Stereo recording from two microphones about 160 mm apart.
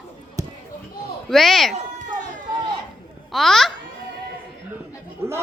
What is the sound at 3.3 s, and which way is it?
Speech, centre (ahead or behind).